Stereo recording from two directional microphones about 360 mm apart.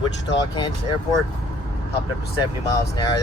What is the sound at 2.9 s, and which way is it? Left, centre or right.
Speech, centre.